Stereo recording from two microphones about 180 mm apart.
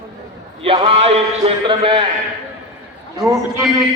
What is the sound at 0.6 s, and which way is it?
Speech, 30° right (ahead or behind).